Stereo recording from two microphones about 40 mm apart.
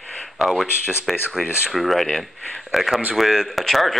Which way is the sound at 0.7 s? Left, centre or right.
Left.